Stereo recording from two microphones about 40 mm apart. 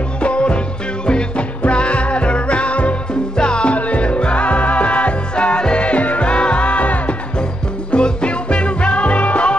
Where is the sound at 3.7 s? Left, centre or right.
Left.